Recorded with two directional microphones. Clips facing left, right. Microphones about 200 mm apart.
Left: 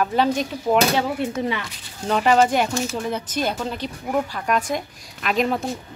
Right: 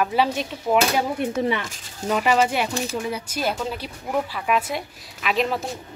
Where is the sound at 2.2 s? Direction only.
35° left (ahead or behind).